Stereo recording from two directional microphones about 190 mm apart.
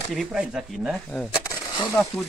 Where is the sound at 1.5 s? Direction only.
15° left (ahead or behind).